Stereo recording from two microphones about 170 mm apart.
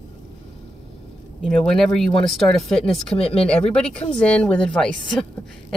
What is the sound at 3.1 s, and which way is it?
Speech, 35° left (ahead or behind).